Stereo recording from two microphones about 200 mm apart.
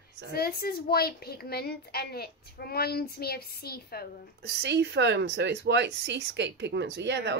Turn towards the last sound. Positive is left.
turn(degrees=-60)  # may be behind; listen again after turning